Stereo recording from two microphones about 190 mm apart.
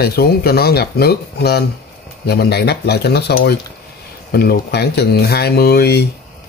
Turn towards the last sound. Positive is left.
turn(degrees=60)  # may be behind; listen again after turning